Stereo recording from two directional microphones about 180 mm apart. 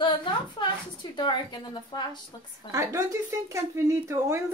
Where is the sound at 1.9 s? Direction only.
25° left (ahead or behind).